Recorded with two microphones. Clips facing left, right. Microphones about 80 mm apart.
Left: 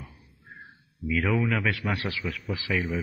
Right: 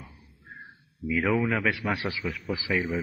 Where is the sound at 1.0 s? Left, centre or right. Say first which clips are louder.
Right 1 dB; centre.